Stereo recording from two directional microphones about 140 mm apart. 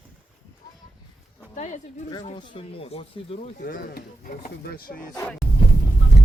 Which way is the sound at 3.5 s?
85° left.